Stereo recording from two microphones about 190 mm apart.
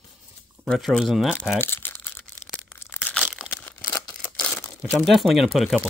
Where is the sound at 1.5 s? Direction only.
10° left (ahead or behind).